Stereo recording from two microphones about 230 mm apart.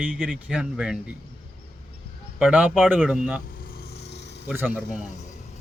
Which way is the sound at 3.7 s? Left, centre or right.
Left.